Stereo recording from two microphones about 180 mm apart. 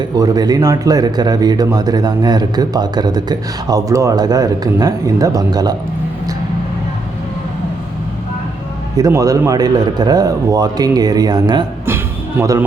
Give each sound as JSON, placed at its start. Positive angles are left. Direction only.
{"t": 0.0, "sound": "speech", "side_deg": -20}
{"t": 9.0, "sound": "speech", "side_deg": -20}